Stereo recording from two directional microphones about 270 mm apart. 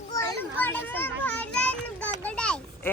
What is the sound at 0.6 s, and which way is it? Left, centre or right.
Children playing, centre.